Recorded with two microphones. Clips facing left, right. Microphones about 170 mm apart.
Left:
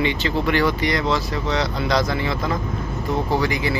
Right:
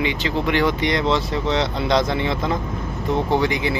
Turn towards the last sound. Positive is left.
turn(degrees=-20)  # may be behind; listen again after turning